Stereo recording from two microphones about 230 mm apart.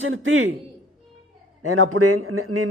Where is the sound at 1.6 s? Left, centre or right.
Right.